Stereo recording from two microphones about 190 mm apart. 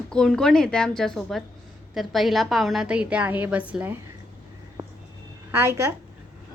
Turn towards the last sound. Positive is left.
turn(degrees=-15)  # may be behind; listen again after turning